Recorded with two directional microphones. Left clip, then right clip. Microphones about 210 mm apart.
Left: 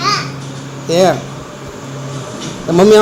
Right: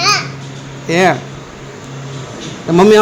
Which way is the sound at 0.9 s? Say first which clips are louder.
Left 1 dB; 40° right (ahead or behind).